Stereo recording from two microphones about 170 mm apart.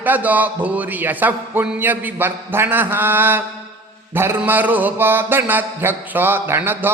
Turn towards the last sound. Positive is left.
turn(degrees=-10)  # may be behind; listen again after turning